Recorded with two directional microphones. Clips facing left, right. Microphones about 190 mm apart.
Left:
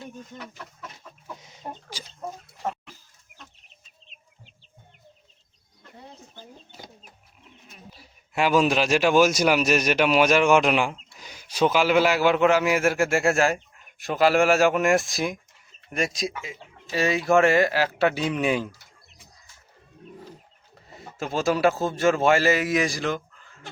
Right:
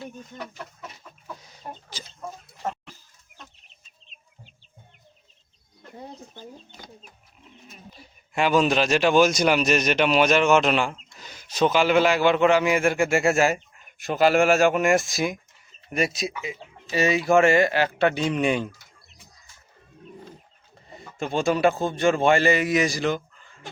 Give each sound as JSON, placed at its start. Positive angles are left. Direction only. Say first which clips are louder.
{"t": 1.3, "sound": "chicken", "louder": "right 1 dB", "side_deg": 20}
{"t": 1.9, "sound": "chicken", "louder": "left 1 dB", "side_deg": 10}
{"t": 7.7, "sound": "a man's voice", "louder": "even", "side_deg": 5}
{"t": 20.9, "sound": "a man's voice", "louder": "right 2 dB", "side_deg": 5}